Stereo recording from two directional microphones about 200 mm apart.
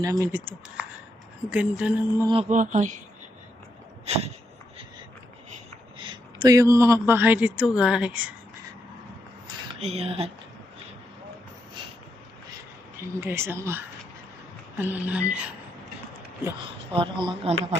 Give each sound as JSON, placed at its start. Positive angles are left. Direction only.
{"t": 0.0, "sound": "speech", "side_deg": -15}
{"t": 2.2, "sound": "speech", "side_deg": -25}
{"t": 2.5, "sound": "speech", "side_deg": -40}
{"t": 4.0, "sound": "a sound", "side_deg": -30}
{"t": 6.0, "sound": "speech", "side_deg": -25}
{"t": 9.7, "sound": "speech", "side_deg": -30}
{"t": 13.1, "sound": "speech", "side_deg": -10}
{"t": 16.9, "sound": "speech", "side_deg": -25}